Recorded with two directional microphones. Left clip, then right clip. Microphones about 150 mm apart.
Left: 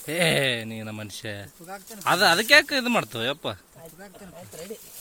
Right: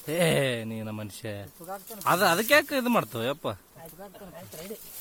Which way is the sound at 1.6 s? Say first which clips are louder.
Right 1 dB; 10° left (ahead or behind).